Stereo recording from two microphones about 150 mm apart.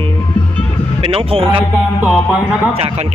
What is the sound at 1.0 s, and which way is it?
Speech, 40° right (ahead or behind).